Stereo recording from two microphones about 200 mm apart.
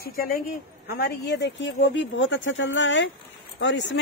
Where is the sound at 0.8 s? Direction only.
55° left (ahead or behind).